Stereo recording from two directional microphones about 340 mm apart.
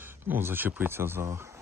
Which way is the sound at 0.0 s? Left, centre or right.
Centre.